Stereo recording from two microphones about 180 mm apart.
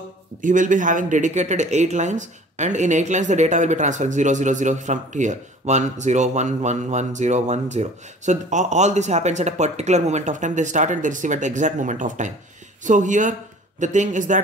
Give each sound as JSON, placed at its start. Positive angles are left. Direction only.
{"t": 0.4, "sound": "speech", "side_deg": -45}